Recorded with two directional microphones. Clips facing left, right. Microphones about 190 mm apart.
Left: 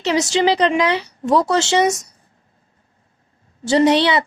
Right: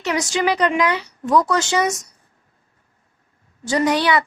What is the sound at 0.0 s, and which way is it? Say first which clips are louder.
A woman's voice: left 4 dB; 25° left (ahead or behind).